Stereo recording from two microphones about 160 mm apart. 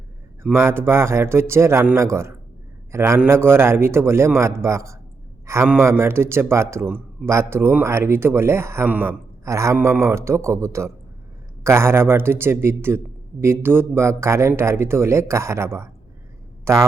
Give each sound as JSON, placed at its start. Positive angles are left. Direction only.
{"t": 0.4, "sound": "speech", "side_deg": -15}